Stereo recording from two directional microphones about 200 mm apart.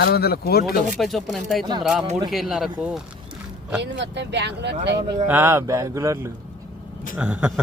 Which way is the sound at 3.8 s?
60° right (ahead or behind).